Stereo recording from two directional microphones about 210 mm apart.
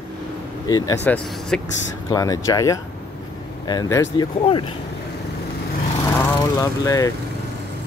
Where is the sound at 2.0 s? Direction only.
15° left (ahead or behind).